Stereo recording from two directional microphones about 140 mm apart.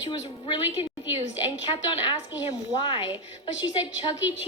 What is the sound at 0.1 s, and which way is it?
A woman's voice, 35° left (ahead or behind).